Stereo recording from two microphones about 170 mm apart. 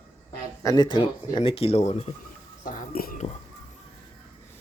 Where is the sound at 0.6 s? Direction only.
20° left (ahead or behind); by 2.1 s 40° left (ahead or behind).